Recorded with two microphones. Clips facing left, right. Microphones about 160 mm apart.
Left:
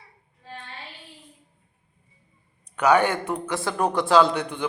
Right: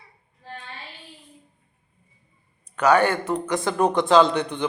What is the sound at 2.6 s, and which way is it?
A man's voice, 10° left (ahead or behind).